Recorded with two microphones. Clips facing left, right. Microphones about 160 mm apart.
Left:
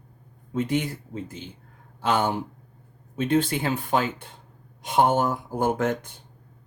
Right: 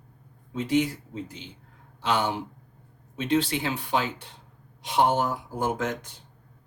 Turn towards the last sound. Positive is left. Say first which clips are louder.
# left 4 dB
turn(degrees=55)  # may be behind; listen again after turning